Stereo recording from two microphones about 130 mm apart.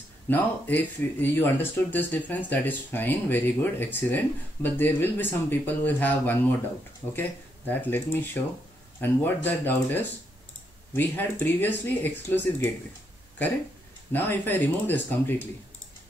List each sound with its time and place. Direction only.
0.3 s speech: 15° left (ahead or behind)
14.1 s speech: 15° left (ahead or behind)